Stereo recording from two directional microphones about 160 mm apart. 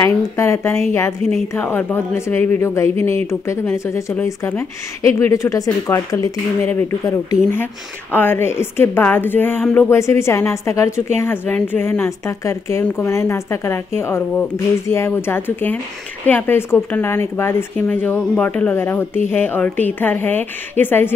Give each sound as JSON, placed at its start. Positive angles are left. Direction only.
{"t": 0.0, "sound": "speech", "side_deg": 20}